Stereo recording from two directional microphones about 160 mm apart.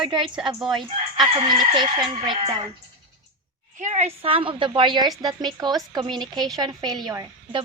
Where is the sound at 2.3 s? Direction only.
30° right (ahead or behind).